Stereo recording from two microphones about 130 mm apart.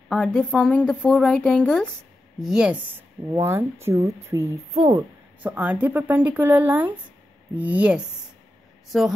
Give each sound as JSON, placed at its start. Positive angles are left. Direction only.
{"t": 0.1, "sound": "speech", "side_deg": 5}
{"t": 2.4, "sound": "speech", "side_deg": -5}
{"t": 3.3, "sound": "speech", "side_deg": -20}
{"t": 5.4, "sound": "speech", "side_deg": -10}